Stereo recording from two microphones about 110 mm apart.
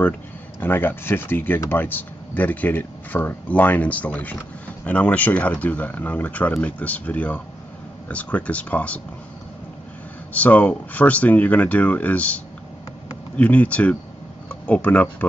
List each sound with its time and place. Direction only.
0.6 s speech: 20° left (ahead or behind)
10.3 s speech: 15° left (ahead or behind)
13.4 s speech: 15° left (ahead or behind)